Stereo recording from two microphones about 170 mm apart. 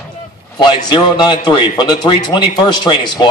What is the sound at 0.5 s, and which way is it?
A man's voice, 30° left (ahead or behind).